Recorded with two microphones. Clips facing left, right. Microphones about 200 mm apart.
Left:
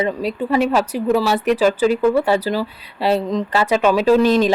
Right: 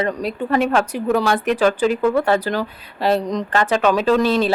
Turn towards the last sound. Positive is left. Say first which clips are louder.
# left 3 dB
turn(degrees=10)  # may be behind; listen again after turning